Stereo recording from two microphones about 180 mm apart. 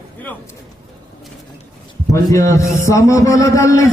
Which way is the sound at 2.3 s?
15° left (ahead or behind).